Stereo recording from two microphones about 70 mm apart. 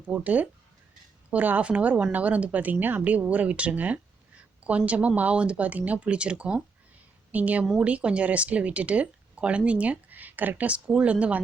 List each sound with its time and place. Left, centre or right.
0.1 s a woman's voice: right